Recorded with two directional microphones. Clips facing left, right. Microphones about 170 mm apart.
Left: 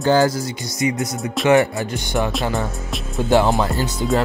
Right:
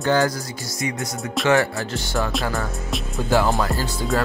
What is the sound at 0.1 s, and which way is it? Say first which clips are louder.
Speech: left 4 dB; 25° left (ahead or behind).